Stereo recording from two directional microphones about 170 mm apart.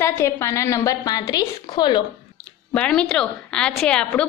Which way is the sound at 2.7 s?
5° left (ahead or behind).